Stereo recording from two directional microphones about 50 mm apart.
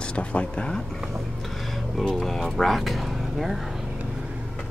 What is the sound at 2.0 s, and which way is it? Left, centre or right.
Speech, centre.